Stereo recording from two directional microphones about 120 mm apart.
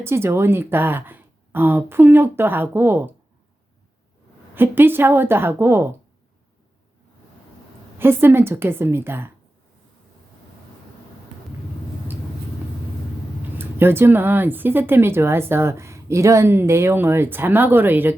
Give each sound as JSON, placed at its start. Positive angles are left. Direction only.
{"t": 0.0, "sound": "speech", "side_deg": -20}
{"t": 4.5, "sound": "speech", "side_deg": -20}
{"t": 7.9, "sound": "speech", "side_deg": -20}
{"t": 13.6, "sound": "speech", "side_deg": -20}